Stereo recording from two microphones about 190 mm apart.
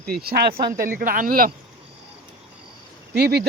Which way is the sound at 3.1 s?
55° right (ahead or behind).